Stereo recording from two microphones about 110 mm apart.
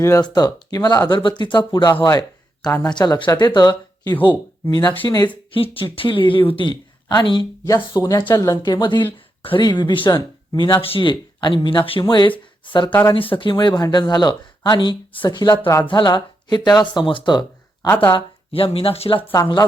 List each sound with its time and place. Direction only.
0.2 s speech: 40° left (ahead or behind)
5.7 s speech: 50° left (ahead or behind)
9.1 s a sound: 55° left (ahead or behind)
9.6 s speech: 45° left (ahead or behind)
10.1 s speech: 35° left (ahead or behind)
10.8 s speech: 60° left (ahead or behind)
12.9 s speech: 20° left (ahead or behind)
13.1 s speech: 55° left (ahead or behind)
17.8 s speech: 15° left (ahead or behind)
18.1 s speech: 55° left (ahead or behind)